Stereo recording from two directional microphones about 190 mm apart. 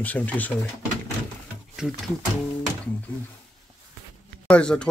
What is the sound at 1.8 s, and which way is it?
Speech, 5° right (ahead or behind).